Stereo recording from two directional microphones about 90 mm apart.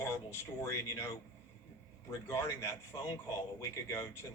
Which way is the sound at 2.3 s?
30° left (ahead or behind).